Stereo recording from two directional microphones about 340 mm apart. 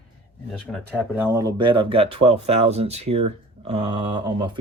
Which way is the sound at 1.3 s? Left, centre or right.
Centre.